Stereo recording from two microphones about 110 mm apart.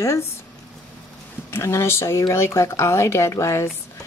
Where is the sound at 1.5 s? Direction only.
25° left (ahead or behind).